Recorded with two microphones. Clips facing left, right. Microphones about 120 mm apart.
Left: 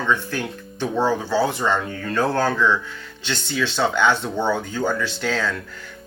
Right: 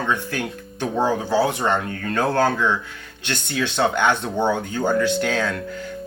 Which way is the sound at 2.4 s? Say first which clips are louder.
Even; 15° right (ahead or behind).